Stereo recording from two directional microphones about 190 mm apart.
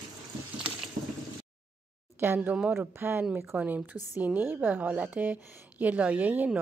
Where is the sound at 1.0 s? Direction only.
35° right (ahead or behind).